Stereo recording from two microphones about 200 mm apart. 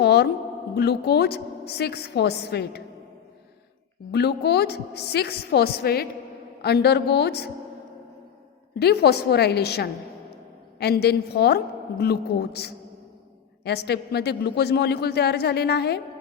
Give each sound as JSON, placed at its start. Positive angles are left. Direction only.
{"t": 0.0, "sound": "a woman's voice", "side_deg": 55}
{"t": 4.1, "sound": "a woman's voice", "side_deg": 55}
{"t": 8.7, "sound": "a man's voice", "side_deg": 55}